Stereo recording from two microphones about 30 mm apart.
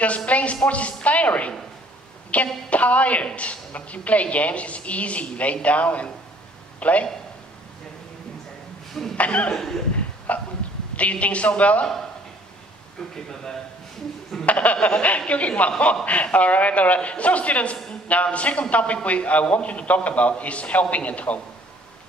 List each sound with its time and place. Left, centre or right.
0.3 s a woman's voice: left
9.1 s speech: left
9.5 s a man's voice: centre
10.3 s a woman's voice: left
13.1 s a man's voice: centre
14.4 s a woman's voice: left